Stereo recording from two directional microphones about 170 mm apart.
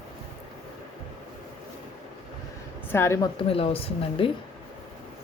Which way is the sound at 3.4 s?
35° left (ahead or behind).